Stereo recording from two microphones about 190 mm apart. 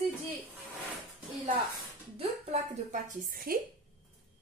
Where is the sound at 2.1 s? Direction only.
35° right (ahead or behind).